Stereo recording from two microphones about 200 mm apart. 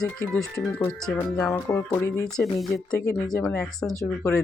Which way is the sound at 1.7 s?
15° left (ahead or behind).